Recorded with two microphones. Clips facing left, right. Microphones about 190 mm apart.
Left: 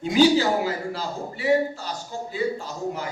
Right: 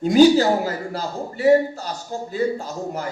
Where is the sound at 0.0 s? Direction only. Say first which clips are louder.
Right 5 dB; 45° right (ahead or behind).